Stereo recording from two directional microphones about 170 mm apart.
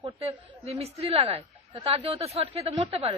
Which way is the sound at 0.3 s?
35° right (ahead or behind).